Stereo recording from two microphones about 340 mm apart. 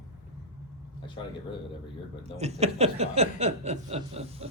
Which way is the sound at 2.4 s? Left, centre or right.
Centre.